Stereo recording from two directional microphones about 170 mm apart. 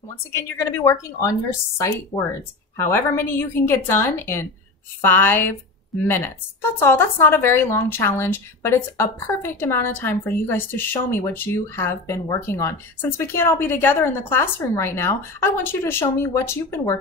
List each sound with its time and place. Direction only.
0.3 s a woman's voice: 15° left (ahead or behind)
2.8 s a woman's voice: 15° left (ahead or behind)